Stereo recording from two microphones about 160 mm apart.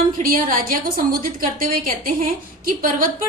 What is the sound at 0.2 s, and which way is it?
A woman's voice, 60° right (ahead or behind).